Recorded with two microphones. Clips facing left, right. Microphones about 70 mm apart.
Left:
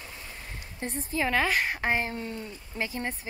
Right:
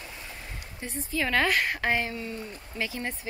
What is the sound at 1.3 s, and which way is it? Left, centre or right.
A woman's voice, centre.